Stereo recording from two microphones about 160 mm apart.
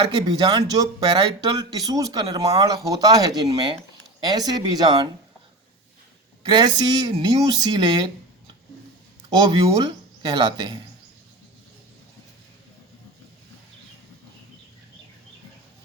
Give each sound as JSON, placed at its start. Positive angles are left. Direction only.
{"t": 0.0, "sound": "speech", "side_deg": -25}
{"t": 6.4, "sound": "speech", "side_deg": -25}
{"t": 9.3, "sound": "speech", "side_deg": -25}